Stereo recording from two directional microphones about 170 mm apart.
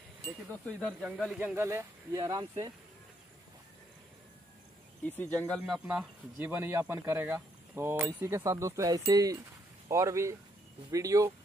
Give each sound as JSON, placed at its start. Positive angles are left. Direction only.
{"t": 0.5, "sound": "speech", "side_deg": 5}
{"t": 1.5, "sound": "speech", "side_deg": -15}
{"t": 5.0, "sound": "speech", "side_deg": 10}
{"t": 6.4, "sound": "speech", "side_deg": -15}